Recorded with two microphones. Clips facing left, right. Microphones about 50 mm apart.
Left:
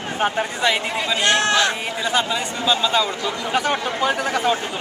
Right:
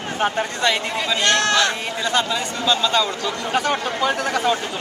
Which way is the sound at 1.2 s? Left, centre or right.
Left.